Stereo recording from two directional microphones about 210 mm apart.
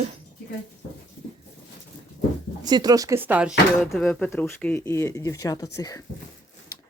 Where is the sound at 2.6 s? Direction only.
20° right (ahead or behind).